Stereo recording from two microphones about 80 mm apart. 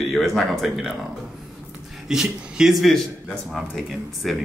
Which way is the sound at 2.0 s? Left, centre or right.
Centre.